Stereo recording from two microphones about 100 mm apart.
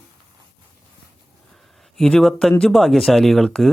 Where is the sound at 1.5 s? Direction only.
Centre (ahead or behind).